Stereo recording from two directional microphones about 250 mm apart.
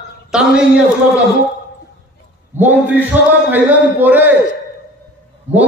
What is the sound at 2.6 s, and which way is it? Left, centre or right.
A man's voice, centre.